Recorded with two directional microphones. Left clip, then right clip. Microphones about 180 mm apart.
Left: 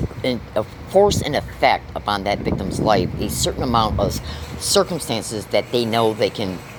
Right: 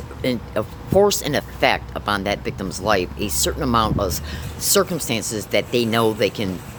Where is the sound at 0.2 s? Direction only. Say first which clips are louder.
Left 1 dB; 15° right (ahead or behind).